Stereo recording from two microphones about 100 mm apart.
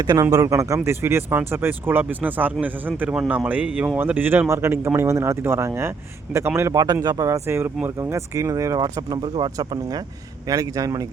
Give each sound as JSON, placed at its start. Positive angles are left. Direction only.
{"t": 0.0, "sound": "speech", "side_deg": -35}
{"t": 10.4, "sound": "speech", "side_deg": -35}